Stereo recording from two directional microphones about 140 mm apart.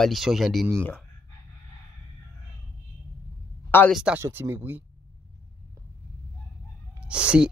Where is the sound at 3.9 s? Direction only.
Centre (ahead or behind).